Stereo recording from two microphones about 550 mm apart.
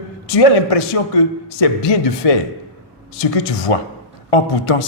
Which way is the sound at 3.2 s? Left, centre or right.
Left.